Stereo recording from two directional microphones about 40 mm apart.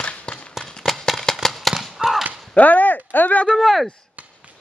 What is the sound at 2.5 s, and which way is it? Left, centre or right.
Speech, left.